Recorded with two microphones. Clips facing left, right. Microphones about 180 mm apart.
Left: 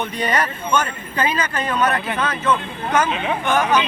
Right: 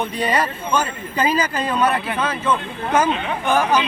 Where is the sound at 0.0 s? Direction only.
30° right (ahead or behind).